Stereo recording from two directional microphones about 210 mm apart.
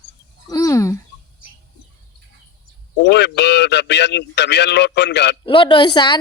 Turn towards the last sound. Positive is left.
turn(degrees=20)  # may be behind; listen again after turning